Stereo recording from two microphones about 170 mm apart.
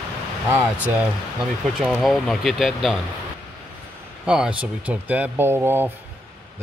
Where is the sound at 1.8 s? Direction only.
Centre (ahead or behind).